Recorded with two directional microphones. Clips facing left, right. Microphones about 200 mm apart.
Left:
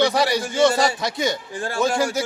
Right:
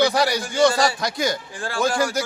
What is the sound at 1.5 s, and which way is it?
Speech, 20° left (ahead or behind).